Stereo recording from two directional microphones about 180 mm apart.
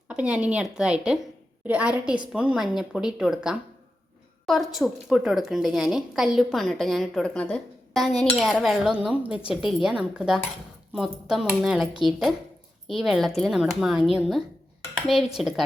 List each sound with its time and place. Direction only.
0.1 s a woman's voice: 5° right (ahead or behind)
12.9 s a woman's voice: centre (ahead or behind)